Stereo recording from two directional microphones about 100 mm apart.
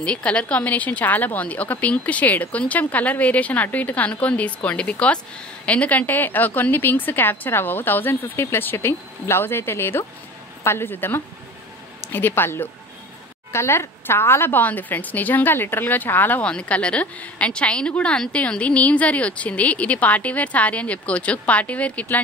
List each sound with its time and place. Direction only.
0.0 s a woman's voice: 10° left (ahead or behind)